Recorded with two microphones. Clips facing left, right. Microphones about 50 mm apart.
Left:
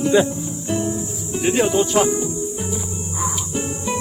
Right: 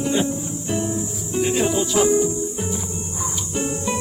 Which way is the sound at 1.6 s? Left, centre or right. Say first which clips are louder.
Left 4 dB; left.